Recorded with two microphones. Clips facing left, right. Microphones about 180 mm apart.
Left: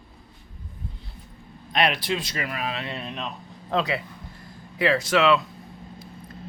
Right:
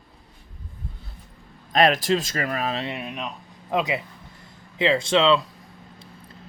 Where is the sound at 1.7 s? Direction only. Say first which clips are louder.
Right 5 dB; 45° right (ahead or behind).